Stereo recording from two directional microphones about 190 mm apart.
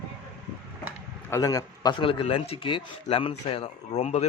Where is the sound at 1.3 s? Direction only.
20° left (ahead or behind).